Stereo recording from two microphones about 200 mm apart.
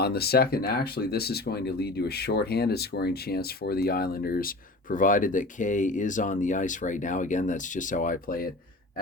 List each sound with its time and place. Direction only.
0.0 s speech: 50° left (ahead or behind)